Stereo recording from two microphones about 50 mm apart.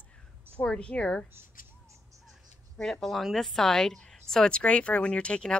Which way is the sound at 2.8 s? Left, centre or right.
Centre.